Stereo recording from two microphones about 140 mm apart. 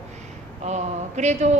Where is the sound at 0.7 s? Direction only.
55° right (ahead or behind).